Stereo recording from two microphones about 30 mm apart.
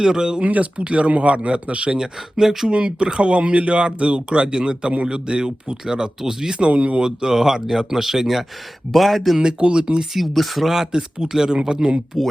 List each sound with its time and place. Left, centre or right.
0.0 s speech: right
0.4 s speech: right
2.0 s speech: centre
2.6 s speech: right
5.8 s speech: right
6.7 s speech: right
7.3 s speech: centre
8.9 s speech: centre
9.4 s speech: right
10.2 s speech: centre
10.9 s speech: right
12.1 s speech: centre